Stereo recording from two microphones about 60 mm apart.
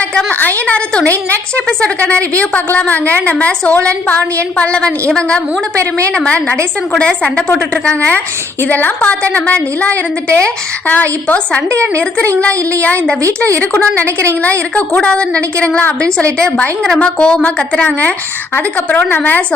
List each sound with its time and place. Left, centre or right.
0.1 s a woman's voice: centre
13.2 s a woman's voice: right
13.6 s a woman's voice: left
14.0 s a woman's voice: right
15.0 s a woman's voice: centre